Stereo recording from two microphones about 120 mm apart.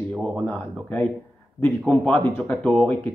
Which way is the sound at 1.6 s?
10° left (ahead or behind).